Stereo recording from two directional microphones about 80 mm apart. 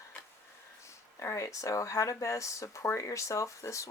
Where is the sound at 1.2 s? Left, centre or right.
Left.